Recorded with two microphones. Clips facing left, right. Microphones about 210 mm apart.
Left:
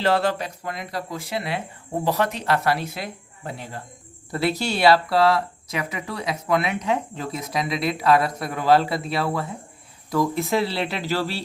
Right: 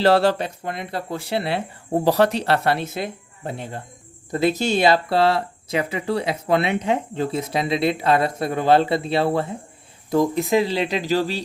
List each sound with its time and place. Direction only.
0.0 s speech: 35° right (ahead or behind); by 11.4 s 15° right (ahead or behind)